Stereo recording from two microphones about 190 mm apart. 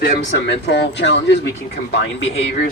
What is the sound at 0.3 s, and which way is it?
Speech, 70° left (ahead or behind).